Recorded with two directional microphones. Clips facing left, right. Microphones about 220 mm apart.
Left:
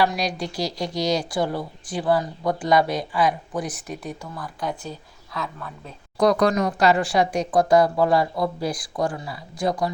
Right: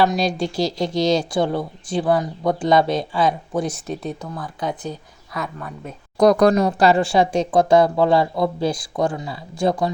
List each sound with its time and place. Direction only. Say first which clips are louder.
0.0 s a woman's voice: right 4 dB; 25° right (ahead or behind)
6.1 s a woman's voice: right 5 dB; 45° right (ahead or behind); by 9.9 s 25° right (ahead or behind)